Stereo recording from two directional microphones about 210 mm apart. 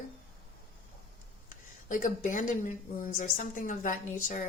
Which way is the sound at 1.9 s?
40° left (ahead or behind).